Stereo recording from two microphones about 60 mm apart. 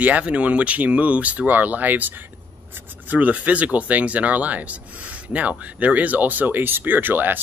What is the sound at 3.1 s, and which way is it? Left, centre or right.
Speech, right.